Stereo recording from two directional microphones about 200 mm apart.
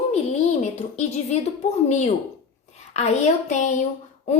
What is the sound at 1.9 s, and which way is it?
A woman's voice, 35° left (ahead or behind).